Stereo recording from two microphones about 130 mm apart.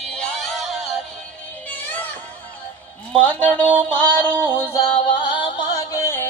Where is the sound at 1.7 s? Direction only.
15° left (ahead or behind).